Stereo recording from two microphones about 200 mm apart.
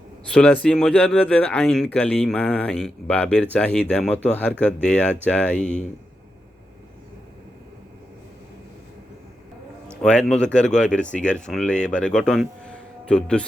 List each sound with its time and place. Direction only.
0.3 s speech: 5° left (ahead or behind)
10.0 s speech: 5° left (ahead or behind)
10.9 s speech: 40° left (ahead or behind)
11.2 s speech: 5° left (ahead or behind)